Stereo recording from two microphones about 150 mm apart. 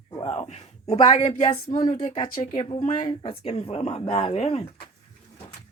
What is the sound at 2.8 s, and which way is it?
Speech, 60° left (ahead or behind).